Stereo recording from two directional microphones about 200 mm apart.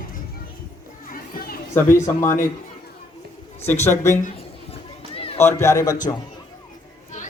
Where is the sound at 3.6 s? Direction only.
10° left (ahead or behind).